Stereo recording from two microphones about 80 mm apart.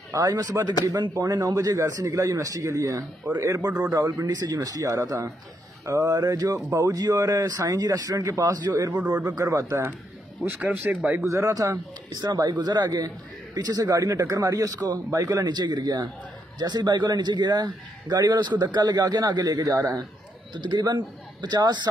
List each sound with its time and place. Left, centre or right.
0.1 s a man's voice: right
3.3 s a sound: right
3.9 s speech: right
5.9 s a sound: right
6.1 s speech: right
10.4 s speech: right
11.2 s speech: right
12.3 s a man's voice: right
15.4 s a man's voice: right
20.5 s a man's voice: right